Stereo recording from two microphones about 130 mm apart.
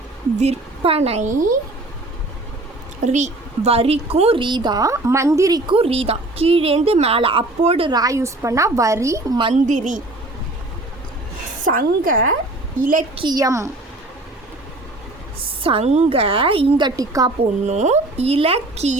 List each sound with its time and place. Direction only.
0.3 s a woman's voice: 50° right (ahead or behind); by 1.5 s 75° right (ahead or behind)
3.0 s a woman's voice: 65° right (ahead or behind); by 5.7 s 30° right (ahead or behind)
5.7 s a woman's voice: 45° right (ahead or behind)
7.9 s a woman's voice: 30° right (ahead or behind)
9.6 s a woman's voice: 80° right
11.6 s a woman's voice: 90° right
13.1 s a woman's voice: 30° right (ahead or behind)
15.6 s a woman's voice: 50° right (ahead or behind); by 17.3 s 25° right (ahead or behind)
17.7 s a woman's voice: 60° right (ahead or behind)